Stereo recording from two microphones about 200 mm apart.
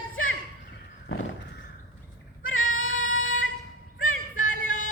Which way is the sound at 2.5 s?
90° left.